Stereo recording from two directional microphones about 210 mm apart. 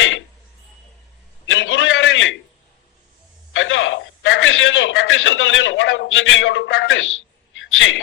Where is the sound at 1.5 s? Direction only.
65° left (ahead or behind).